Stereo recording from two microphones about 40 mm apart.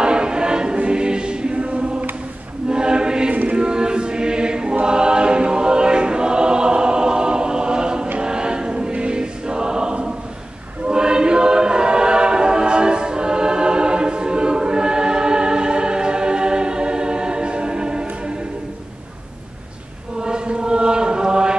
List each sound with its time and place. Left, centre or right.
0.0 s choir: right
20.2 s chant: right